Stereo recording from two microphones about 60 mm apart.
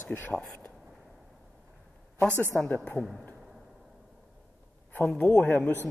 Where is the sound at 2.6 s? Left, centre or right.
Centre.